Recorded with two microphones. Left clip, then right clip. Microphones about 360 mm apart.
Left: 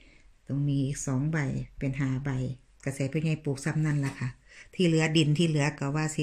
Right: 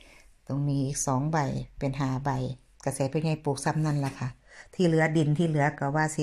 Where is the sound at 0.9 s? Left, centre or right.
Centre.